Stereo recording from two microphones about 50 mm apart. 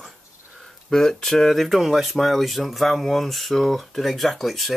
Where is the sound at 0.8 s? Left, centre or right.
Centre.